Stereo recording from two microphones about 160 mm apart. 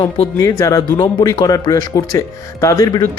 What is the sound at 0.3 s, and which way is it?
Speech, 20° left (ahead or behind).